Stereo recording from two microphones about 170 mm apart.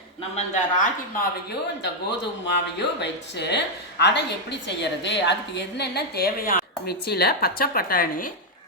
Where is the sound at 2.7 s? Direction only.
85° left.